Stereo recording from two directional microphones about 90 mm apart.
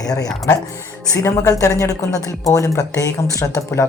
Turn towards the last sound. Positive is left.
turn(degrees=35)  # may be behind; listen again after turning